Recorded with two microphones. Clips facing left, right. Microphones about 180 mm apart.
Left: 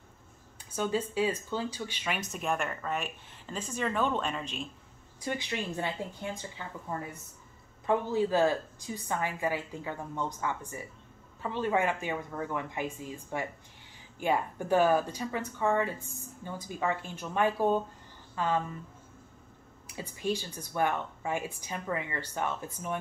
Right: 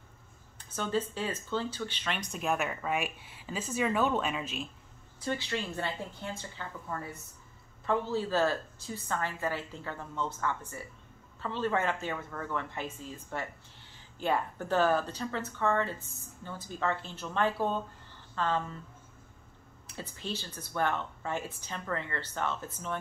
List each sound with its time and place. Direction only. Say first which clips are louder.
0.6 s speech: left 1 dB; 10° left (ahead or behind)
5.2 s speech: even; 15° left (ahead or behind)
7.8 s speech: left 3 dB; 15° left (ahead or behind)
19.9 s speech: left 6 dB; 10° left (ahead or behind)